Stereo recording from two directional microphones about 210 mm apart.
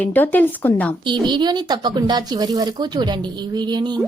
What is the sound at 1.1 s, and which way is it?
Speech, 20° right (ahead or behind).